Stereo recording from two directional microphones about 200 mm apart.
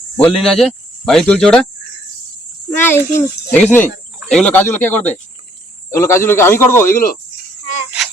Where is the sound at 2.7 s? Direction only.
10° left (ahead or behind).